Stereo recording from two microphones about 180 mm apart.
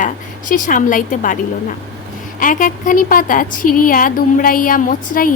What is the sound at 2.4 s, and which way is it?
A woman's voice, 50° left (ahead or behind).